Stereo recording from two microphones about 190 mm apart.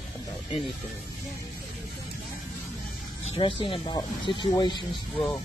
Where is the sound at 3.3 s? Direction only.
25° left (ahead or behind).